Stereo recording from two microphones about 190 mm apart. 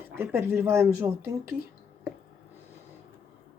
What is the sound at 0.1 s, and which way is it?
Speech, 10° right (ahead or behind).